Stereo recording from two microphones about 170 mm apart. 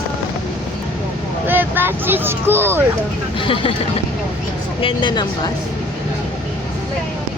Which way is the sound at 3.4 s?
30° left (ahead or behind).